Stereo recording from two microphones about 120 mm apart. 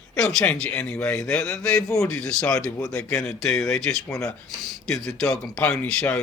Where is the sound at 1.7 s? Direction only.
25° left (ahead or behind).